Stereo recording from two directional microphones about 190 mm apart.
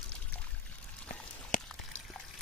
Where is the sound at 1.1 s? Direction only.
45° left (ahead or behind).